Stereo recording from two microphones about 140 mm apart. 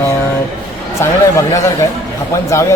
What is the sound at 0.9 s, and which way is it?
Speech, 20° left (ahead or behind).